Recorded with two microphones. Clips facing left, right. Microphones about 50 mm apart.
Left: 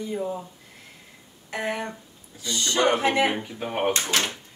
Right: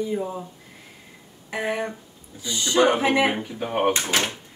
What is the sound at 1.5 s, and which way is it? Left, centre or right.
Speech, centre.